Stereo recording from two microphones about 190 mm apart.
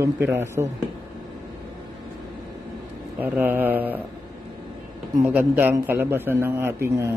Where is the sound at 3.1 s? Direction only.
10° right (ahead or behind).